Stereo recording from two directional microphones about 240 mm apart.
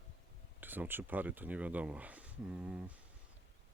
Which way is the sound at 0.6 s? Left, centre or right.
Centre.